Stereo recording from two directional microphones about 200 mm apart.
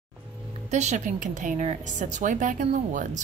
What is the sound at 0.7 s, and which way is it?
A woman's voice, 35° right (ahead or behind).